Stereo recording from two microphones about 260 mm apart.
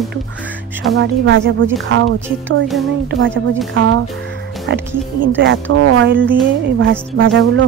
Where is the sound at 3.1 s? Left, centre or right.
Right.